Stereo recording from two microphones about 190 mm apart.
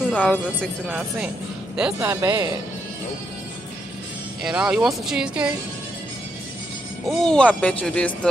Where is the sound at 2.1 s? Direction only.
15° right (ahead or behind).